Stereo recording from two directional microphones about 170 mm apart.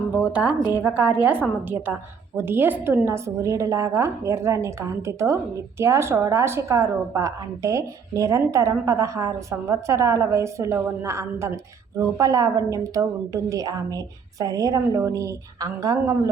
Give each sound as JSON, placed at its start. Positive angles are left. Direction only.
{"t": 0.2, "sound": "a woman's voice", "side_deg": -5}